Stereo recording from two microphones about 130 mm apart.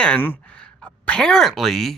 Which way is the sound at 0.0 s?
10° left (ahead or behind).